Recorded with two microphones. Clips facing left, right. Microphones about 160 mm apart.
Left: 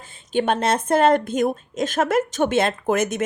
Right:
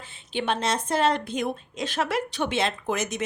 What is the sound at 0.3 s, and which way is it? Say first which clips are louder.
A woman's voice: left 6 dB; 50° left (ahead or behind).